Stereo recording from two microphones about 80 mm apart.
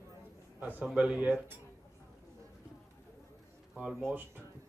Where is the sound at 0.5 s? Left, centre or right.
Right.